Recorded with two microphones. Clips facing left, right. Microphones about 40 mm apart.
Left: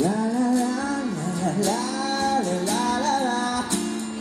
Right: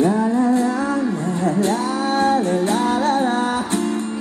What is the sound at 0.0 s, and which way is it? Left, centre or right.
Music, right.